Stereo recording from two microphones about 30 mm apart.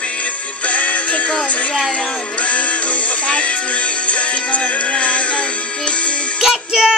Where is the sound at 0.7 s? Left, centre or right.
Left.